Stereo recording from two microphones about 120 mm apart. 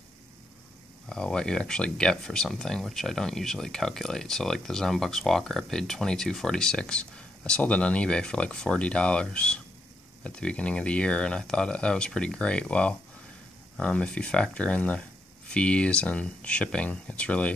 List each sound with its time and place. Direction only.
1.0 s speech: 5° left (ahead or behind)